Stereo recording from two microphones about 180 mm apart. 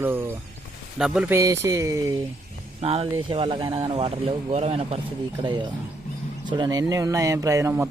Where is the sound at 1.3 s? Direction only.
15° right (ahead or behind).